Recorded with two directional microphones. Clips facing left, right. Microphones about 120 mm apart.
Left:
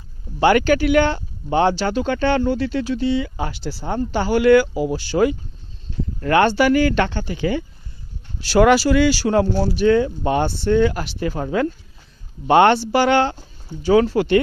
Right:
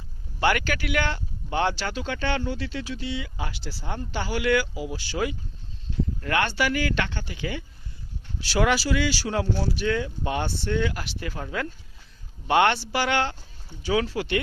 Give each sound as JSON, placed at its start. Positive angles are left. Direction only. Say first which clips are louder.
{"t": 0.3, "sound": "speech", "louder": "left 9 dB", "side_deg": 30}
{"t": 2.0, "sound": "speech", "louder": "left 9 dB", "side_deg": 45}
{"t": 8.4, "sound": "speech", "louder": "left 9 dB", "side_deg": 50}